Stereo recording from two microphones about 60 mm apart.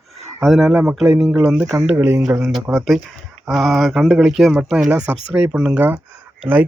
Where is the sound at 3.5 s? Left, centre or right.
Centre.